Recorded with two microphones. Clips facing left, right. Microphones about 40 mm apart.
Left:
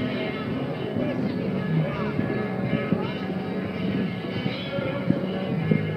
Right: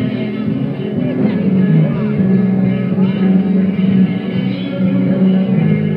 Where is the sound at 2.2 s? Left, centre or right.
Centre.